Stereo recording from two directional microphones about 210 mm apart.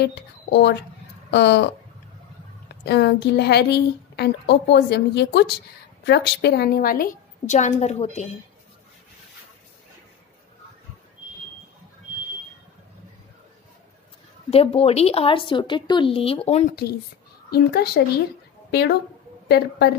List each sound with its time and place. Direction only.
0.0 s a woman's voice: 55° left (ahead or behind)
2.8 s a woman's voice: 50° left (ahead or behind); by 8.3 s 30° left (ahead or behind)
14.5 s a woman's voice: 30° left (ahead or behind)
17.5 s a woman's voice: 50° left (ahead or behind)